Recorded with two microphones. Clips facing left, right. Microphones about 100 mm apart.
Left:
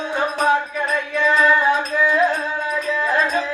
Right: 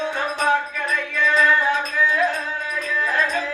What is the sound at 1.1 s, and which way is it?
Music, 20° left (ahead or behind).